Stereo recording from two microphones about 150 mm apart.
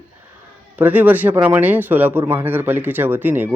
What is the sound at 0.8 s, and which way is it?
Speech, 10° right (ahead or behind).